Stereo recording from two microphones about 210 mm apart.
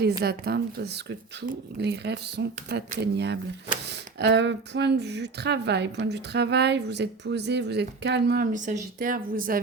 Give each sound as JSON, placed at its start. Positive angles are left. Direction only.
{"t": 0.2, "sound": "speech", "side_deg": -50}
{"t": 8.5, "sound": "speech", "side_deg": -35}